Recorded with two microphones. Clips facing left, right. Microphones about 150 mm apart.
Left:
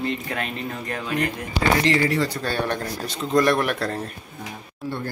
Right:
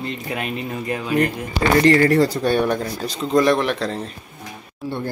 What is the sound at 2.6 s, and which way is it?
Speech, 5° right (ahead or behind).